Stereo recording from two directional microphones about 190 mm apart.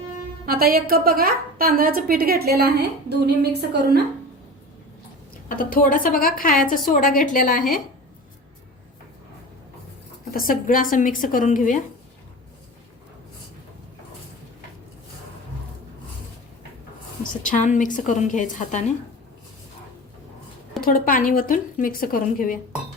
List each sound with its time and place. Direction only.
0.4 s a woman's voice: 50° right (ahead or behind)
5.5 s a woman's voice: 45° left (ahead or behind)
10.3 s a woman's voice: 45° left (ahead or behind)
17.4 s a woman's voice: 40° left (ahead or behind)
20.8 s a woman's voice: 50° left (ahead or behind)